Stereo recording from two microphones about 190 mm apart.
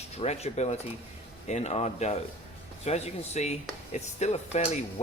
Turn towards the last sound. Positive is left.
turn(degrees=35)  # may be behind; listen again after turning